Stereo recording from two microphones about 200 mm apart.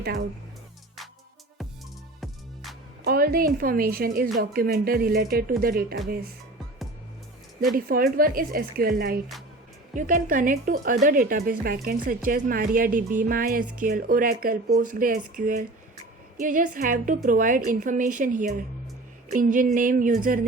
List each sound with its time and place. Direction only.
2.2 s music: centre (ahead or behind)
3.0 s a woman's voice: 50° right (ahead or behind)
7.9 s a woman's voice: 45° right (ahead or behind)